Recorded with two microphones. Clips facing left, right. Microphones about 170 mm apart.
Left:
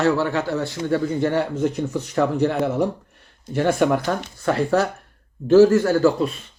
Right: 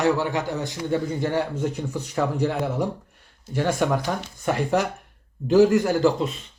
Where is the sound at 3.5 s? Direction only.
10° right (ahead or behind).